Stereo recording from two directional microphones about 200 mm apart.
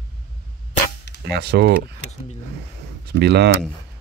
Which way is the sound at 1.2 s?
55° right (ahead or behind).